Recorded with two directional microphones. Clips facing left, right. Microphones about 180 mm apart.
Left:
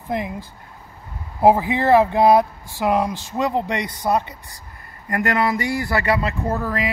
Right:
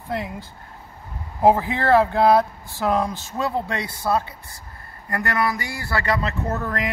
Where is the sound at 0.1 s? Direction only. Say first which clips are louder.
Left 3 dB; 15° left (ahead or behind).